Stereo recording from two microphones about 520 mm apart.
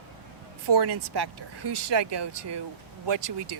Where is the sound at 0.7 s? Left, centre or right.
Right.